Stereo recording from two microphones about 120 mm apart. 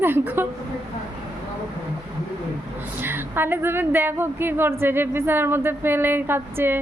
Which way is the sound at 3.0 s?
20° right (ahead or behind).